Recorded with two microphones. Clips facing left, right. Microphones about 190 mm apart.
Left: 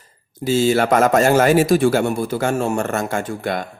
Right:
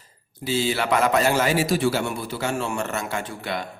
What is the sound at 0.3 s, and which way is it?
A man's voice, 45° left (ahead or behind).